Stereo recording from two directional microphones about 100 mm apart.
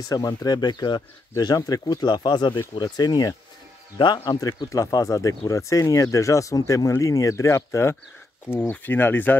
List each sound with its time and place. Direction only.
0.0 s speech: 35° left (ahead or behind); by 9.4 s 20° left (ahead or behind)